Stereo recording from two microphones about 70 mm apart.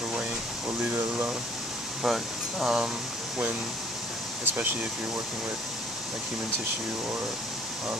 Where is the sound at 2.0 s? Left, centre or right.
Centre.